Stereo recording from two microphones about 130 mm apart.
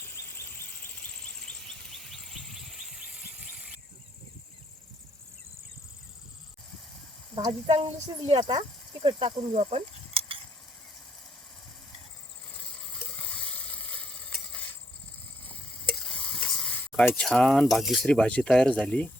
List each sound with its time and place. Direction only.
0.1 s a sound: 20° left (ahead or behind)
0.9 s a sound: 5° left (ahead or behind)
7.3 s speech: 45° right (ahead or behind)
9.0 s speech: 45° right (ahead or behind)
12.5 s sizzle: 10° left (ahead or behind)
15.9 s stir: 5° left (ahead or behind)
16.9 s speech: centre (ahead or behind)